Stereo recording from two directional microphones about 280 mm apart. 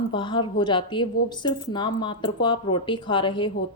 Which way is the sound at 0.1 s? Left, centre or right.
Centre.